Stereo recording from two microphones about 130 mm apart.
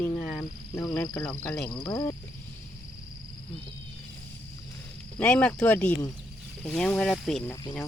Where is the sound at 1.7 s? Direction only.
35° left (ahead or behind).